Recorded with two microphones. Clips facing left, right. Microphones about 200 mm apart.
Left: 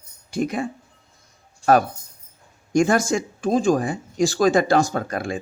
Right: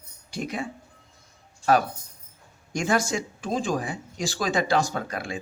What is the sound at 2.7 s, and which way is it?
Speech, 50° left (ahead or behind).